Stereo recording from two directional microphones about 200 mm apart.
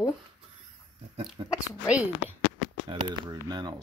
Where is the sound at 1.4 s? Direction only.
25° right (ahead or behind).